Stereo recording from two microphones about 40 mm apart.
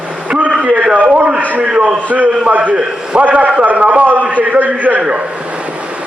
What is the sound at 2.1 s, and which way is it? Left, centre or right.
A man's voice, right.